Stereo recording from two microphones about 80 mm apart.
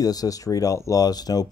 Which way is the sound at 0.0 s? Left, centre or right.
Left.